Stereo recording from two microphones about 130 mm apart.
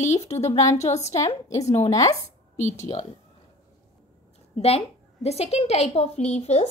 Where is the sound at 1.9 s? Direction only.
25° left (ahead or behind).